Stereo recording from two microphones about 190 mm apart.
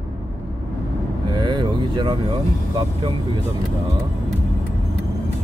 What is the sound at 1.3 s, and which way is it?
Vehicle, 25° right (ahead or behind).